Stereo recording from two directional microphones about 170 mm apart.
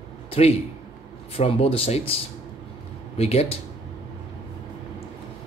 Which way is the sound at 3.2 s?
35° left (ahead or behind).